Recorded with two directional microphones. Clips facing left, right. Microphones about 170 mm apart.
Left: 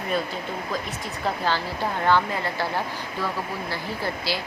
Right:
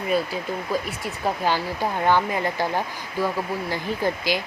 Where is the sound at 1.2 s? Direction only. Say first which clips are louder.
Right 2 dB; 15° right (ahead or behind).